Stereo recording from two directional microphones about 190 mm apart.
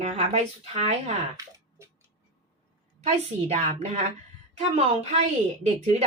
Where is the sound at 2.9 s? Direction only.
35° right (ahead or behind).